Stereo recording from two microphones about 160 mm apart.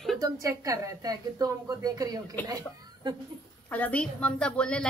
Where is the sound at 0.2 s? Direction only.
20° right (ahead or behind).